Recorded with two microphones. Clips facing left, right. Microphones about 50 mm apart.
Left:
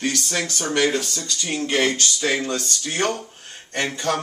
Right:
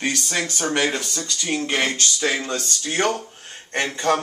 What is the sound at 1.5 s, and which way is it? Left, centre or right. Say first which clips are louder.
Speech: left 1 dB; centre.